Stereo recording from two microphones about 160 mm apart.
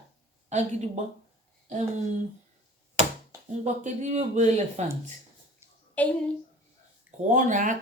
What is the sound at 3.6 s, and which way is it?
Speech, 45° right (ahead or behind).